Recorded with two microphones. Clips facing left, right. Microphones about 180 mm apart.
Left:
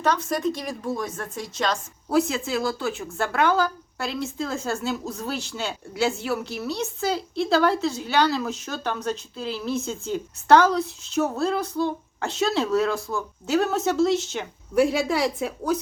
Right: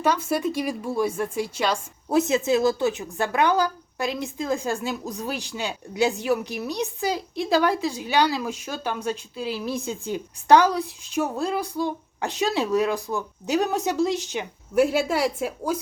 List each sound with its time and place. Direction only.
0.0 s a woman's voice: 10° right (ahead or behind)
2.0 s a woman's voice: 20° right (ahead or behind)